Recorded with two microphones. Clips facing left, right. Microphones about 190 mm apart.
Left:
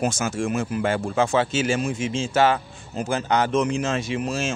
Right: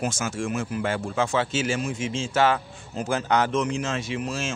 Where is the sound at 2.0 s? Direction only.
15° left (ahead or behind).